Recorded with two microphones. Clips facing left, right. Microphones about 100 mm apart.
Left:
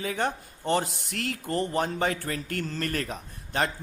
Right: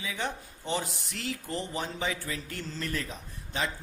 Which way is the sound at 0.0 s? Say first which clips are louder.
Left 6 dB; 50° left (ahead or behind).